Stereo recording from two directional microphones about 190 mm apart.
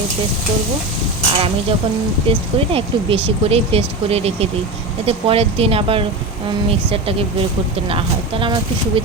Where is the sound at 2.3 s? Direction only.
30° right (ahead or behind).